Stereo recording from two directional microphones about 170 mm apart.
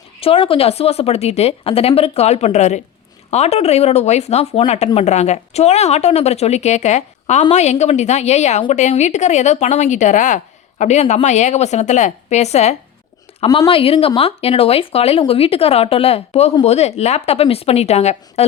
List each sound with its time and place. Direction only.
0.2 s a woman's voice: 35° left (ahead or behind)